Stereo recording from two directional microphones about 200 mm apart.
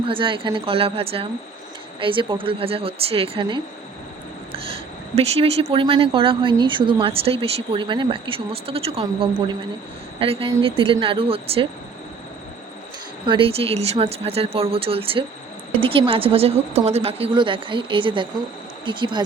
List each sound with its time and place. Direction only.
0.0 s speech: 25° right (ahead or behind)
13.2 s speech: 25° right (ahead or behind)